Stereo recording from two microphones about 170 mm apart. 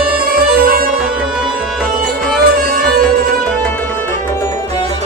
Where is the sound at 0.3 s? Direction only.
60° right (ahead or behind).